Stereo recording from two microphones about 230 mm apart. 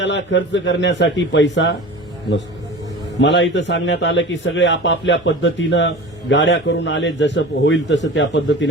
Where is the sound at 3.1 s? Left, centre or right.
Left.